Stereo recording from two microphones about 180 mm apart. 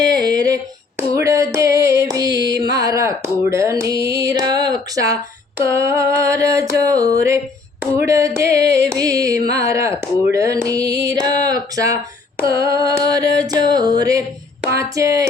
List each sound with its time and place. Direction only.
0.1 s female singing: 20° right (ahead or behind)
2.3 s music: 70° right (ahead or behind)
2.7 s a sound: 20° right (ahead or behind)